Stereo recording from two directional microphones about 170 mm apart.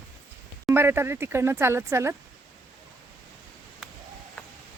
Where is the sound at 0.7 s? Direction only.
15° right (ahead or behind).